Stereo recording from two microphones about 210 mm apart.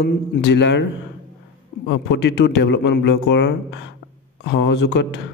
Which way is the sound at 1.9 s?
55° left (ahead or behind).